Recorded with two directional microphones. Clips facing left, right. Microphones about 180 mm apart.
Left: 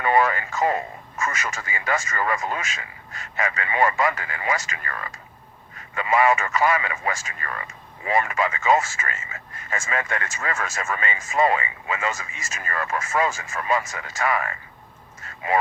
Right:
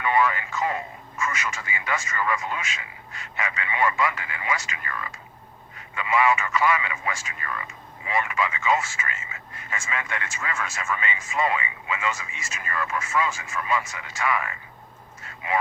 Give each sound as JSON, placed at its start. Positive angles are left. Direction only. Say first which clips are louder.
{"t": 0.0, "sound": "speech", "louder": "left 3 dB", "side_deg": 45}